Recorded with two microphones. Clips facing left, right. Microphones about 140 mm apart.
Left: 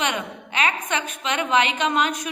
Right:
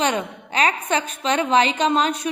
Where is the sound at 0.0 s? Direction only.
35° right (ahead or behind).